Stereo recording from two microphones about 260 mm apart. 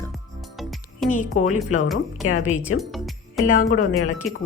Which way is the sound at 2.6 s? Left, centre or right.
Centre.